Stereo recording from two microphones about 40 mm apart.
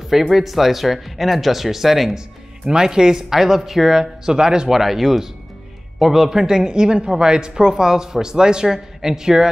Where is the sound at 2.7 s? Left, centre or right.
Centre.